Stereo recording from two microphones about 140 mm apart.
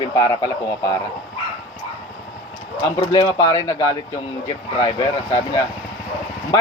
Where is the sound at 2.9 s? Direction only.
35° left (ahead or behind).